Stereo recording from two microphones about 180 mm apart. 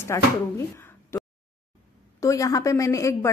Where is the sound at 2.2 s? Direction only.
20° left (ahead or behind).